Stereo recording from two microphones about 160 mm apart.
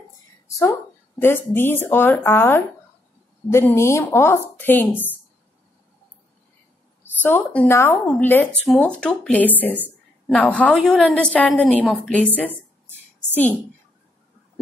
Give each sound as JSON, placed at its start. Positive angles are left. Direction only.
{"t": 0.5, "sound": "a woman's voice", "side_deg": 20}
{"t": 7.2, "sound": "a woman's voice", "side_deg": 10}